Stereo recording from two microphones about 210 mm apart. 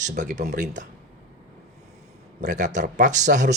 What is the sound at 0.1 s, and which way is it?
Speech, 35° right (ahead or behind).